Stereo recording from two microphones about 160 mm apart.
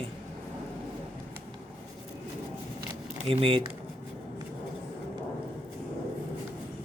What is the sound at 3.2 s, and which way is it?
Speech, 35° right (ahead or behind).